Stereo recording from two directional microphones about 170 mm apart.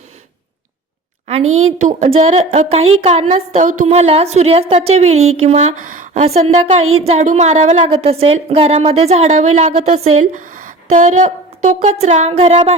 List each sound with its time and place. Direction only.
1.3 s a woman's voice: 40° right (ahead or behind)